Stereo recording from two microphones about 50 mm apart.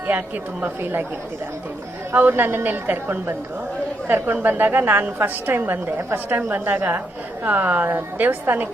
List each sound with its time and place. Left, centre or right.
0.6 s a woman's voice: right
2.1 s a woman's voice: right
6.0 s a woman's voice: right
6.3 s a woman's voice: right